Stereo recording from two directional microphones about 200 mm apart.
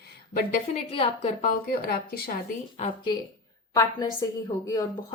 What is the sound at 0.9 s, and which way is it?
A woman's voice, 25° left (ahead or behind).